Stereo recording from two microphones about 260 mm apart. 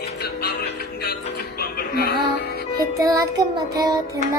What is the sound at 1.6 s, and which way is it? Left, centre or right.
Music, left.